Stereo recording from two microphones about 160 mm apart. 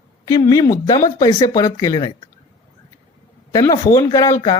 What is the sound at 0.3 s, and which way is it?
Speech, 20° left (ahead or behind).